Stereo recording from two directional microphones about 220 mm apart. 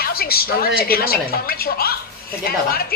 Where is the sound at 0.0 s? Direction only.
45° left (ahead or behind).